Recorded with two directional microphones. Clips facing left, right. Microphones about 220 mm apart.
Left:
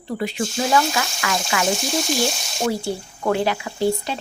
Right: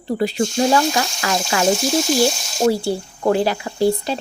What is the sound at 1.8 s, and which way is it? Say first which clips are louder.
Speech: right 5 dB; centre (ahead or behind).